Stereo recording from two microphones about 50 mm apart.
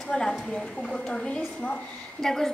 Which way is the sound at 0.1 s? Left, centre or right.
Centre.